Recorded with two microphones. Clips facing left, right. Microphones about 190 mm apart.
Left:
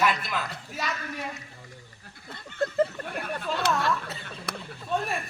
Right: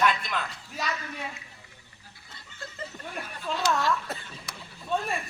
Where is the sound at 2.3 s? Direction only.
60° left (ahead or behind).